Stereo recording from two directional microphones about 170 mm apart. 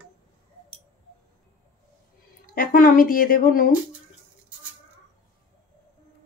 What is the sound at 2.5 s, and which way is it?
A woman's voice, 55° left (ahead or behind).